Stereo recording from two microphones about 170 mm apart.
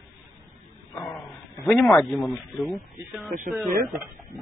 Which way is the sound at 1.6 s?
5° left (ahead or behind).